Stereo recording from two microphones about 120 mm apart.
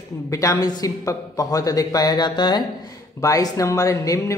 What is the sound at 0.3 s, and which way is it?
Speech, 25° left (ahead or behind).